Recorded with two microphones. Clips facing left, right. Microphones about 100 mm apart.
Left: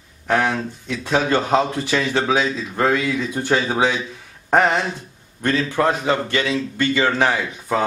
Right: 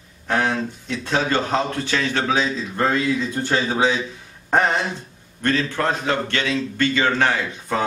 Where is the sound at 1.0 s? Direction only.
10° left (ahead or behind).